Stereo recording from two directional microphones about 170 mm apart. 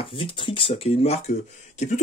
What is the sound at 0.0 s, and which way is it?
A man's voice, 30° left (ahead or behind).